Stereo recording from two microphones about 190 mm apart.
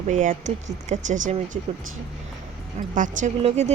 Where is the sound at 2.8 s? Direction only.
45° right (ahead or behind).